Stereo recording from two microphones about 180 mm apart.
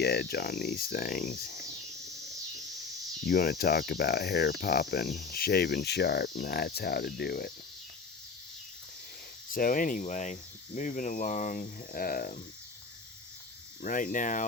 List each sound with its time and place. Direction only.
0.0 s cricket: 60° left (ahead or behind)
3.2 s cricket: 60° left (ahead or behind)
9.5 s speech: 50° left (ahead or behind)
13.8 s speech: 45° left (ahead or behind)